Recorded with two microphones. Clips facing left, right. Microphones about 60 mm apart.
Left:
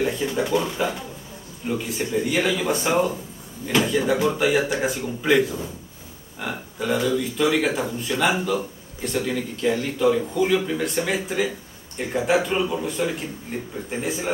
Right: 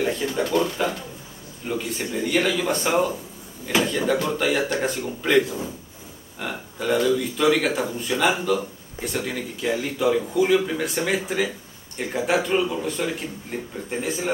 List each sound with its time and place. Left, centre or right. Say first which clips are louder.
0.0 s speech: even; centre